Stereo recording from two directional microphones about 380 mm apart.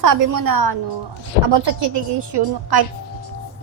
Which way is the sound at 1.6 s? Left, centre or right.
Right.